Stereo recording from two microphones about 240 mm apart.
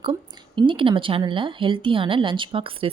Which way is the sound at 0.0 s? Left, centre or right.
Centre.